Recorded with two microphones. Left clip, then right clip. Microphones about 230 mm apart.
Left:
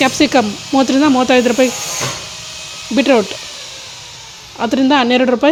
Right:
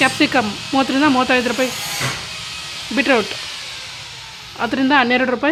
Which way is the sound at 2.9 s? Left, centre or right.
Left.